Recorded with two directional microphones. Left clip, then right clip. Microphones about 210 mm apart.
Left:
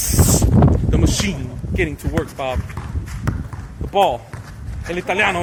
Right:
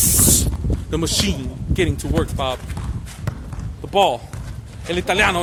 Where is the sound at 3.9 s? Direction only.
20° right (ahead or behind).